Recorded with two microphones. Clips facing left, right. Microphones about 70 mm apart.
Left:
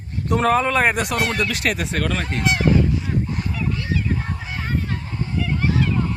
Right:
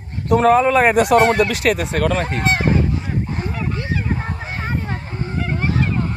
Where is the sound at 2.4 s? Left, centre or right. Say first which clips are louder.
Left 1 dB; right.